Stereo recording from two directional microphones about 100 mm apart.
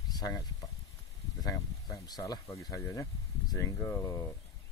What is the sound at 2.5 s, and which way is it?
Speech, 30° left (ahead or behind).